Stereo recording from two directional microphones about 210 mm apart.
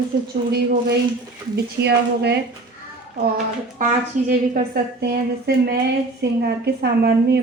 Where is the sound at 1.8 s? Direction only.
50° right (ahead or behind).